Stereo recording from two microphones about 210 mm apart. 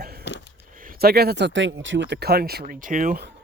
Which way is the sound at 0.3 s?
55° left (ahead or behind).